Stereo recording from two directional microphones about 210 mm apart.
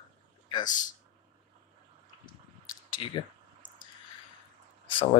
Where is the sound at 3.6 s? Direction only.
40° left (ahead or behind).